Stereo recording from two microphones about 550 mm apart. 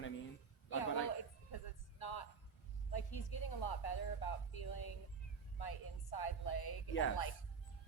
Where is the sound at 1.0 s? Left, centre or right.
Left.